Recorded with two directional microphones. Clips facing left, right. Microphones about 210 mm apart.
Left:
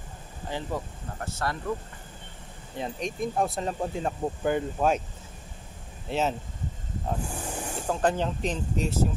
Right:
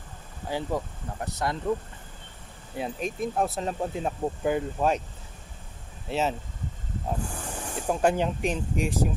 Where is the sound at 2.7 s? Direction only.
5° right (ahead or behind).